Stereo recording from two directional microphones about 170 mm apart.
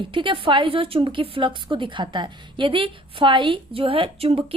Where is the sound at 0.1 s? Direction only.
30° right (ahead or behind).